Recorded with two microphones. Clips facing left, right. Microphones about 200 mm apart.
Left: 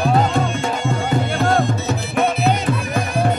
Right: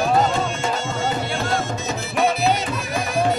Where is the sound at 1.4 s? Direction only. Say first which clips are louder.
Left 9 dB; 55° left (ahead or behind).